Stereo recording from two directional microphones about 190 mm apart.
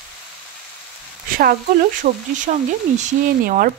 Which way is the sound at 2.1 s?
40° right (ahead or behind).